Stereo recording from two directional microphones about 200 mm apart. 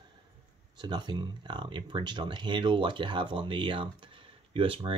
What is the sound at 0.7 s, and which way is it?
Speech, 20° right (ahead or behind).